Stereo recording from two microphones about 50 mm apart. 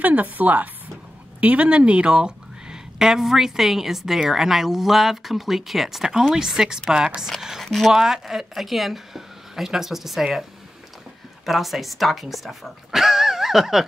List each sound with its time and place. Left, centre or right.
0.0 s speech: right; by 7.9 s centre
7.9 s speech: centre
11.4 s speech: centre